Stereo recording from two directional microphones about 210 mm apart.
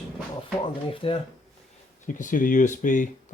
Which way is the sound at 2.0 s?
40° left (ahead or behind).